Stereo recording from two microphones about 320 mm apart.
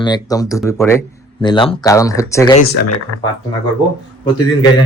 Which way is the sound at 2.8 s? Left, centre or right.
Left.